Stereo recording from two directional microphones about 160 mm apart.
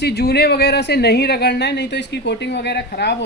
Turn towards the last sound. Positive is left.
turn(degrees=90)